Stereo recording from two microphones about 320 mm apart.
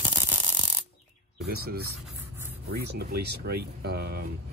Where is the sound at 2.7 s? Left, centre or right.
Right.